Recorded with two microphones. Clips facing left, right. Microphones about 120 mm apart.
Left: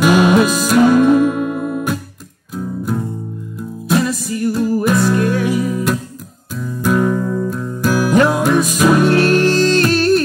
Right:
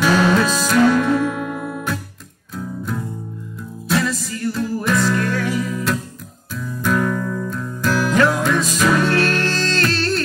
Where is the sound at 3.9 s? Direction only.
15° left (ahead or behind).